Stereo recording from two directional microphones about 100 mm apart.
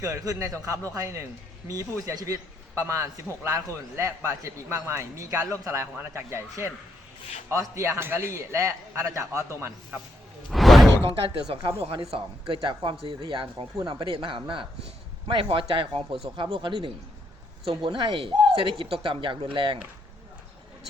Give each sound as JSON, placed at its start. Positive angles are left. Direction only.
{"t": 0.0, "sound": "a man's voice", "side_deg": -35}
{"t": 10.5, "sound": "a sound", "side_deg": 0}
{"t": 11.4, "sound": "speech", "side_deg": -60}
{"t": 13.7, "sound": "speech", "side_deg": -45}
{"t": 14.1, "sound": "speech", "side_deg": -60}